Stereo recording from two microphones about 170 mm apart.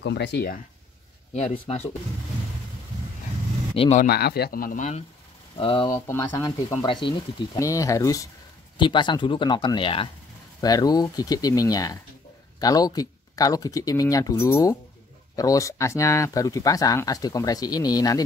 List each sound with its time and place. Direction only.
0.0 s speech: 90° left; by 0.6 s 70° left (ahead or behind)
1.3 s speech: 40° left (ahead or behind)
3.7 s speech: 35° left (ahead or behind)
4.0 s speech: 70° left (ahead or behind); by 5.0 s 45° left (ahead or behind)
5.6 s speech: 30° left (ahead or behind)
5.9 s speech: 15° left (ahead or behind)
6.8 s speech: 30° left (ahead or behind)